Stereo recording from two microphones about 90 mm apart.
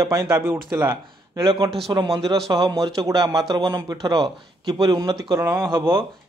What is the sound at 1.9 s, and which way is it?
A man's voice, 45° right (ahead or behind).